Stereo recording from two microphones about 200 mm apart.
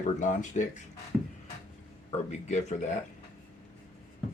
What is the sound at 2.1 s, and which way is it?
Speech, 35° left (ahead or behind).